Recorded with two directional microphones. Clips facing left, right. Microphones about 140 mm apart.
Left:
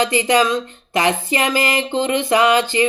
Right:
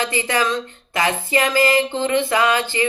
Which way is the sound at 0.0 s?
15° left (ahead or behind).